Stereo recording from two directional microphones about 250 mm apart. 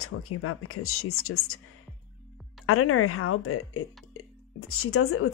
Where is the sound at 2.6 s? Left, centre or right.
Left.